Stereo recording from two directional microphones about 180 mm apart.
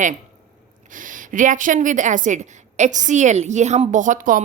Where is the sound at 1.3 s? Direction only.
45° right (ahead or behind).